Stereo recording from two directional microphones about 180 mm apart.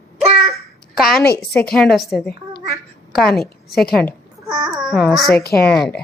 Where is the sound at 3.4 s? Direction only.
60° left (ahead or behind).